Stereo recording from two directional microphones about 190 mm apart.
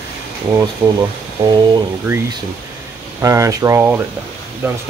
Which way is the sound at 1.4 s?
25° right (ahead or behind).